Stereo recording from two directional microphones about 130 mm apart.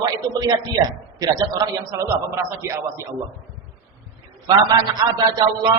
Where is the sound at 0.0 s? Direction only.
30° right (ahead or behind).